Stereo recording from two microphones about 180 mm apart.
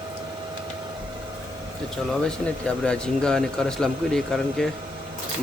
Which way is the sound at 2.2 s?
5° left (ahead or behind).